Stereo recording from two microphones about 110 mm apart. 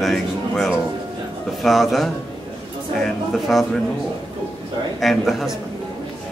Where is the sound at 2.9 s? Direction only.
Centre (ahead or behind).